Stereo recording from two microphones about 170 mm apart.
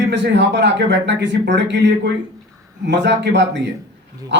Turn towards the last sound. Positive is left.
turn(degrees=-90)